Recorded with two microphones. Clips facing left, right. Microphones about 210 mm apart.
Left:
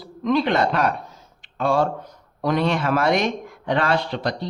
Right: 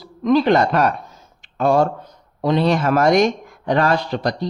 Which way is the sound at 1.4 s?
45° right (ahead or behind).